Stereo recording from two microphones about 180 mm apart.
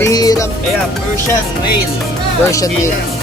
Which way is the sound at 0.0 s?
20° left (ahead or behind).